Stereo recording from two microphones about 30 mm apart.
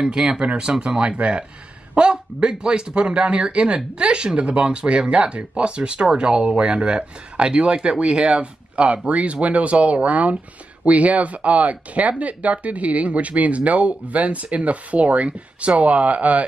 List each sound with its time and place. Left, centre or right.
0.0 s speech: right